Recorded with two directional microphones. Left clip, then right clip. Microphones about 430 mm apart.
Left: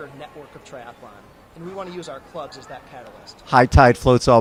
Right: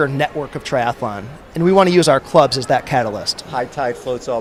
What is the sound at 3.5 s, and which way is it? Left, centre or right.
Speech, left.